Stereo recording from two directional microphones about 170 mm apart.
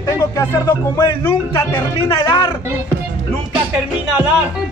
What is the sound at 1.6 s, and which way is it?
Speech, 20° left (ahead or behind).